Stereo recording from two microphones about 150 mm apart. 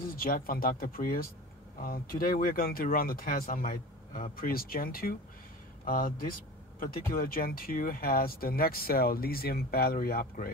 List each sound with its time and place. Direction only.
0.1 s speech: 75° left (ahead or behind)